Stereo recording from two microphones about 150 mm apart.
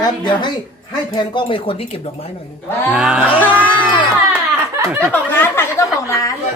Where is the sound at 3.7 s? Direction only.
35° left (ahead or behind).